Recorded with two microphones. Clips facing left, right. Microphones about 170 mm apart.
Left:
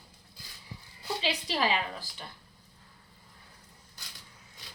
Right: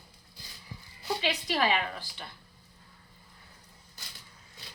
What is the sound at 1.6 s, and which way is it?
Speech, 30° left (ahead or behind).